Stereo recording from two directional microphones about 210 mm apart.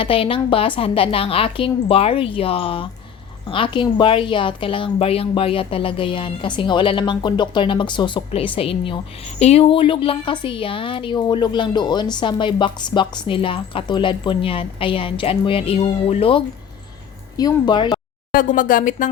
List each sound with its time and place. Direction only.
0.0 s a woman's voice: 25° left (ahead or behind)
18.3 s speech: 40° left (ahead or behind)